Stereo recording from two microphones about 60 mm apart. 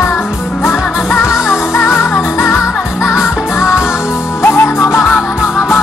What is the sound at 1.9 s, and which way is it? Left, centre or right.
Music, left.